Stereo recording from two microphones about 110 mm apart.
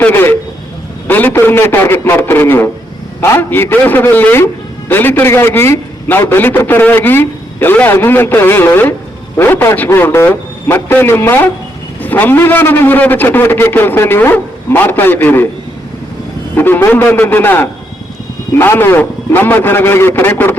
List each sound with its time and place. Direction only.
0.0 s a sound: 20° left (ahead or behind)
1.0 s a man's voice: 15° left (ahead or behind)
16.6 s a man's voice: 20° left (ahead or behind)